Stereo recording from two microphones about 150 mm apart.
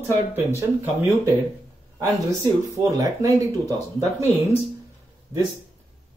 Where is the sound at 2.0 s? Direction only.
20° right (ahead or behind).